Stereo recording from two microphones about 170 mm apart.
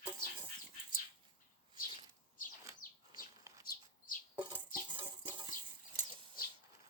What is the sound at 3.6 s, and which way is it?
Bird flight, 55° left (ahead or behind).